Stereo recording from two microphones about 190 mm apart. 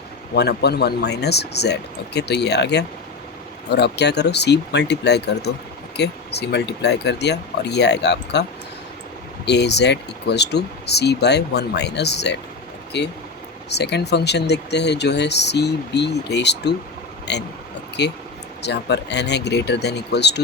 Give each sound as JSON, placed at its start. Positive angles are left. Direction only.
{"t": 0.3, "sound": "speech", "side_deg": 60}
{"t": 9.5, "sound": "speech", "side_deg": 65}